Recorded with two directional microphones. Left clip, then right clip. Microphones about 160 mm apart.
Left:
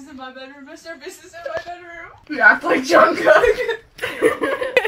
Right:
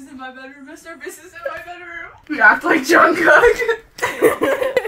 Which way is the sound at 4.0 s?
25° right (ahead or behind).